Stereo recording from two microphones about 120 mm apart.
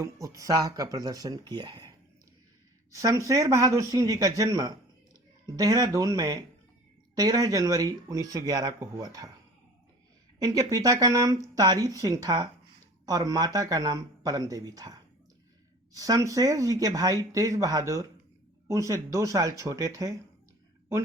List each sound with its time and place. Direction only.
0.0 s speech: 25° right (ahead or behind)
2.9 s speech: 30° right (ahead or behind)
10.4 s speech: 30° right (ahead or behind)
15.9 s speech: 30° right (ahead or behind)